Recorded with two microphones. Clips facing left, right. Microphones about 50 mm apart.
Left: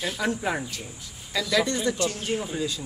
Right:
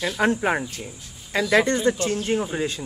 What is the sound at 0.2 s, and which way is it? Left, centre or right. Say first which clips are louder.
Speech: right 7 dB; right.